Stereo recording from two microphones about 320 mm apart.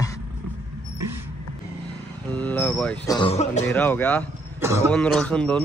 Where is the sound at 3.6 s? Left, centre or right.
Centre.